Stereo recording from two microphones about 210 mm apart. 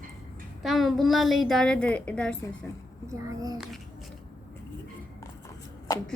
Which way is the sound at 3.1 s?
15° right (ahead or behind).